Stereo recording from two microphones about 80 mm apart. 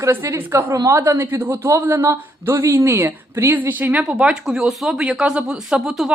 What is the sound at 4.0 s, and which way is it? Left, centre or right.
Speech, centre.